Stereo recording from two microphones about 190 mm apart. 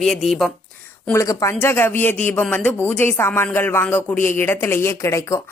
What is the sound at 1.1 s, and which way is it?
Speech, 15° left (ahead or behind).